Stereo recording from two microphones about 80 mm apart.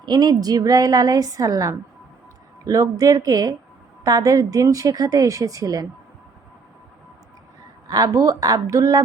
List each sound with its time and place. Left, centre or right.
0.0 s a woman's voice: right
2.8 s a woman's voice: right
7.9 s a woman's voice: right